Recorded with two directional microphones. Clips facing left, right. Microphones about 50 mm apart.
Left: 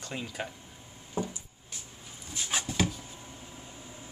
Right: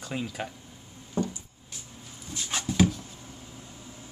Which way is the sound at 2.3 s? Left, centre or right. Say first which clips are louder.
Right 5 dB; centre.